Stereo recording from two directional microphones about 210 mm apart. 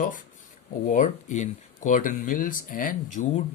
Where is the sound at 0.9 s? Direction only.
35° left (ahead or behind).